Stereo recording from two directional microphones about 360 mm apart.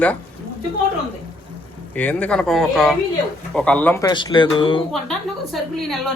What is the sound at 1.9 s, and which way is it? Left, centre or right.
A man's voice, centre.